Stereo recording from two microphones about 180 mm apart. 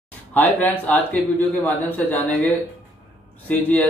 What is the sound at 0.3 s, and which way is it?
A man's voice, 10° left (ahead or behind).